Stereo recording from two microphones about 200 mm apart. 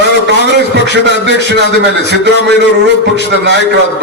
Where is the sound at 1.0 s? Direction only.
60° right (ahead or behind).